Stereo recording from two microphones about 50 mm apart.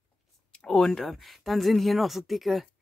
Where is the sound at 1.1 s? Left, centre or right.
Centre.